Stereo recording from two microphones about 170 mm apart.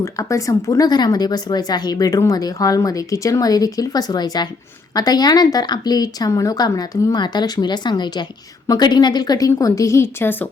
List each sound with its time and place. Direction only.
0.0 s a woman's voice: 20° left (ahead or behind)